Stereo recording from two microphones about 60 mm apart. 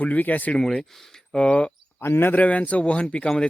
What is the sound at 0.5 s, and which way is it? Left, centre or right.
Speech, centre.